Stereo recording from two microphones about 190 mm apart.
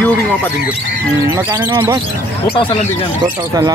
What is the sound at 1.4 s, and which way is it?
Speech, 20° right (ahead or behind).